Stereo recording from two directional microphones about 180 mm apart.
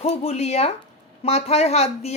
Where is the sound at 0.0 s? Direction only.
35° left (ahead or behind).